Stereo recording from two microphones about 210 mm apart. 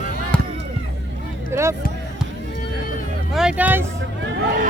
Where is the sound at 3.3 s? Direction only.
5° right (ahead or behind).